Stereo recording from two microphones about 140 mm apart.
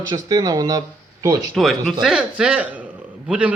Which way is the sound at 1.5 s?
Centre (ahead or behind).